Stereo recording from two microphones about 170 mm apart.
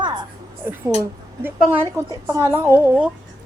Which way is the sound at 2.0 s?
15° right (ahead or behind).